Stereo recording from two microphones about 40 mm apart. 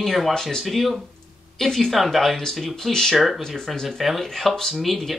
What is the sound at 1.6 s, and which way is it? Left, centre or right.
Speech, centre.